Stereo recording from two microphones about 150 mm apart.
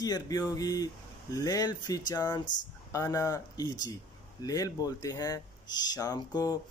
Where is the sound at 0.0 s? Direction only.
25° left (ahead or behind).